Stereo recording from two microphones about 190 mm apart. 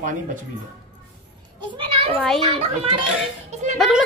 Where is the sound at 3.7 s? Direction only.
Centre (ahead or behind).